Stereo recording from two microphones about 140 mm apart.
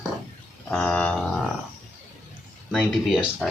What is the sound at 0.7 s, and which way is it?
Livestock, 5° left (ahead or behind).